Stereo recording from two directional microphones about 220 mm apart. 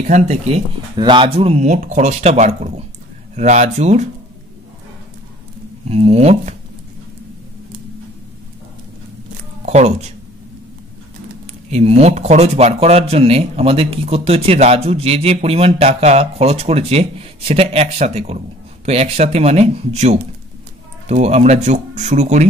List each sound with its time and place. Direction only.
0.0 s speech: 30° right (ahead or behind)
0.9 s speech: 20° right (ahead or behind)
5.9 s speech: 30° right (ahead or behind)
9.7 s speech: 30° right (ahead or behind)
11.7 s speech: 30° right (ahead or behind)